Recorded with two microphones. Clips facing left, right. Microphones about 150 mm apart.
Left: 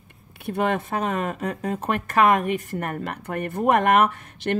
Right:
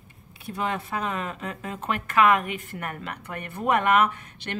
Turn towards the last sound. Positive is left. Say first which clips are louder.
# left 9 dB
turn(degrees=50)  # may be behind; listen again after turning